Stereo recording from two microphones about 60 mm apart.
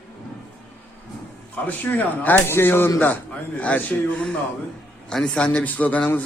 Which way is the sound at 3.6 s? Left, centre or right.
Left.